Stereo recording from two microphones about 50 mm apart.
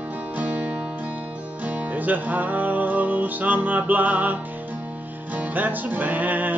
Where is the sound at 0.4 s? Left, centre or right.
Right.